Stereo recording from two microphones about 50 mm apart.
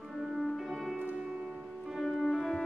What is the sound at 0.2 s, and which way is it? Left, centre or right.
Music, centre.